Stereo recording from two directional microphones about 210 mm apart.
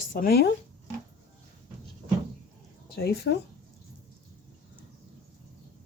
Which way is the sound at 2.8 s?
50° left (ahead or behind).